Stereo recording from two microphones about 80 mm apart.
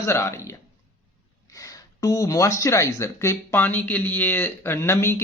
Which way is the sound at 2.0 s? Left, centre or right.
Left.